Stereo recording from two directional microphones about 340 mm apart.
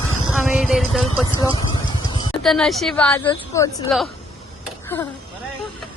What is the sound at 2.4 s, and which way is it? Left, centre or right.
A woman's voice, centre.